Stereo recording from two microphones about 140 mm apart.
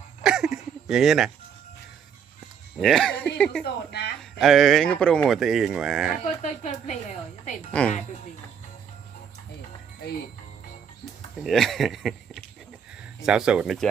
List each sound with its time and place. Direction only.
0.2 s a sound: 5° right (ahead or behind)
2.8 s speech: 5° left (ahead or behind)
6.2 s a woman's voice: 60° left (ahead or behind)
7.7 s speech: 10° left (ahead or behind)
11.4 s speech: centre (ahead or behind)